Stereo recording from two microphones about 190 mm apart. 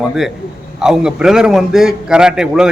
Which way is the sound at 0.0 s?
Centre (ahead or behind).